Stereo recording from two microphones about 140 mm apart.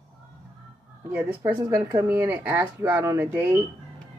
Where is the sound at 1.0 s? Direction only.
15° right (ahead or behind).